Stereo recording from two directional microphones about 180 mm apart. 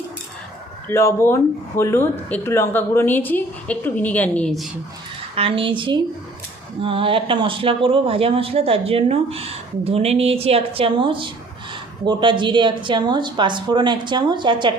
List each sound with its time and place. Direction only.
0.9 s speech: 15° left (ahead or behind)
5.3 s speech: 30° right (ahead or behind)